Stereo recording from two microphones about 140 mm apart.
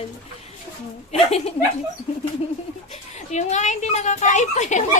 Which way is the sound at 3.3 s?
55° left (ahead or behind).